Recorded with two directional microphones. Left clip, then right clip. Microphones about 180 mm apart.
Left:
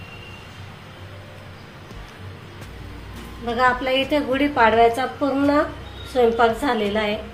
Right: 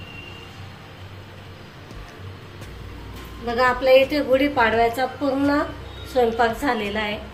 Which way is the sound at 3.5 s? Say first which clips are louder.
Right 2 dB; 25° left (ahead or behind).